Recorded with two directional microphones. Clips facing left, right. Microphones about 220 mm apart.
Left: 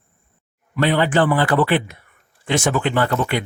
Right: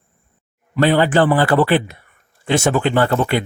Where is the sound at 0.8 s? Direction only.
35° right (ahead or behind).